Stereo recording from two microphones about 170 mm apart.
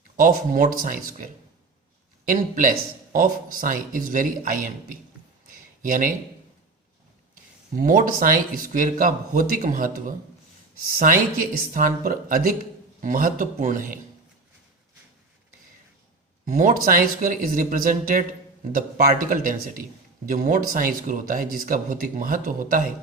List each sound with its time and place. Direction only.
0.2 s speech: 55° right (ahead or behind)
2.3 s speech: 55° right (ahead or behind)
5.5 s a sound: 55° right (ahead or behind)
7.8 s speech: 55° right (ahead or behind)
16.5 s speech: 50° right (ahead or behind)